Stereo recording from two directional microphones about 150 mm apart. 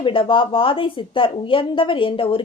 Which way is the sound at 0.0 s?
35° left (ahead or behind).